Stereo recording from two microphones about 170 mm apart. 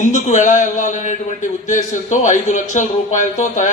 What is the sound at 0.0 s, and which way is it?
A man's voice, 45° left (ahead or behind).